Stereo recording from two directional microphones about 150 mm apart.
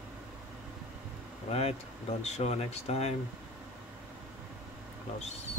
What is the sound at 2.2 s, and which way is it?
Speech, 45° left (ahead or behind).